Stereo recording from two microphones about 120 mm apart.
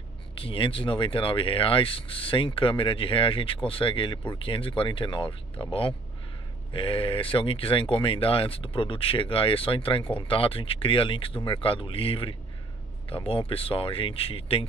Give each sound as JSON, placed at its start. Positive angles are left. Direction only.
{"t": 0.3, "sound": "speech", "side_deg": 50}